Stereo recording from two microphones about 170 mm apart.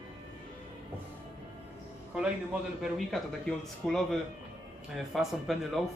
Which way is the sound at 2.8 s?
Centre (ahead or behind).